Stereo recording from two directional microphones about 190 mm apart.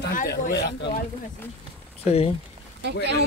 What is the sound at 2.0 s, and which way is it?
Speech, 30° left (ahead or behind).